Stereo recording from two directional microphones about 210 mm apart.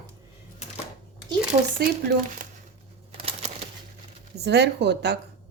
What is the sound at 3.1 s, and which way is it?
Bird, 25° right (ahead or behind).